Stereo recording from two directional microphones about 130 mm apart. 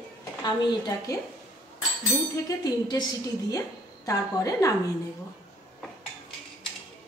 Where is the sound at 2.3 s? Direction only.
30° left (ahead or behind).